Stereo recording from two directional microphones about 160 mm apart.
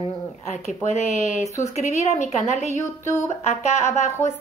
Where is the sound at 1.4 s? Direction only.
20° left (ahead or behind).